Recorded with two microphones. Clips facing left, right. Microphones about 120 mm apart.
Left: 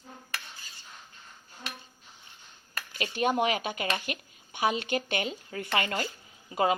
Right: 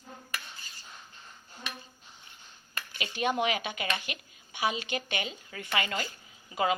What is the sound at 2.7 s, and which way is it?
Speech, 45° left (ahead or behind).